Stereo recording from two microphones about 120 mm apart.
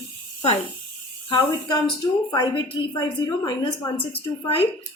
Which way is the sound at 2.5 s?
40° left (ahead or behind).